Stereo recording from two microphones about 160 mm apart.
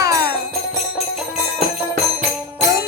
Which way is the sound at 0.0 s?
20° right (ahead or behind).